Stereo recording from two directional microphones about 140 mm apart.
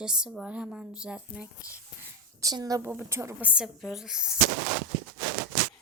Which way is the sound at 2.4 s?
25° right (ahead or behind).